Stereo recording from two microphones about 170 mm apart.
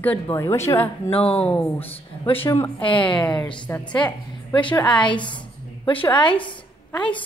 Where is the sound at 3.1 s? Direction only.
5° left (ahead or behind).